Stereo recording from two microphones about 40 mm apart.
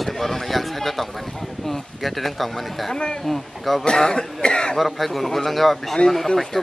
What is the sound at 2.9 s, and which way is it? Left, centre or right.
Speech, left.